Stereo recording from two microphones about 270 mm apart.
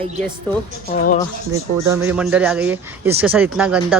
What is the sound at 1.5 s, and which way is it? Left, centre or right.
Speech, centre.